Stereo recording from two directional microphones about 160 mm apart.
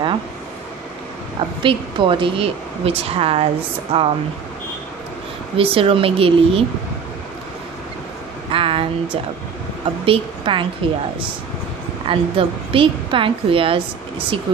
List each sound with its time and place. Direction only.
1.6 s speech: 30° right (ahead or behind)
5.6 s speech: 35° right (ahead or behind)
8.5 s speech: 35° right (ahead or behind)